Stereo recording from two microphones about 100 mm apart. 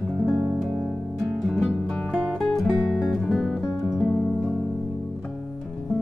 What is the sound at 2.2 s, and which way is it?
Music, 5° left (ahead or behind).